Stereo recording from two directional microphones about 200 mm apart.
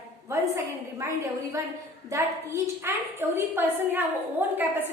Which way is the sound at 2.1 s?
15° right (ahead or behind).